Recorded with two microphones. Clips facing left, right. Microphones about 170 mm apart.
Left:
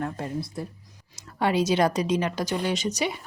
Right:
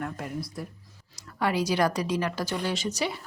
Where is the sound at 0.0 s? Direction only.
30° left (ahead or behind).